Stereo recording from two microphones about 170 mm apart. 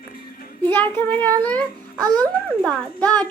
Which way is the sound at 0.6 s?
10° left (ahead or behind).